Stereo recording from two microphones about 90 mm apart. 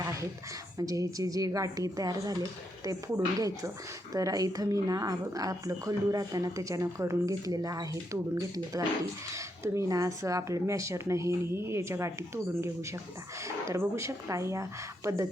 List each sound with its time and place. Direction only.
0.0 s a sound: 35° right (ahead or behind)
0.8 s speech: 40° right (ahead or behind)
4.1 s speech: 40° right (ahead or behind)